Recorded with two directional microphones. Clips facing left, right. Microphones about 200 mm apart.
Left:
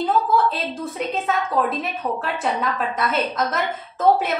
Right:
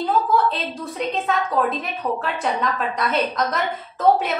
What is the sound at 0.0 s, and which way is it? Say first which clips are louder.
A woman's voice: even; centre (ahead or behind).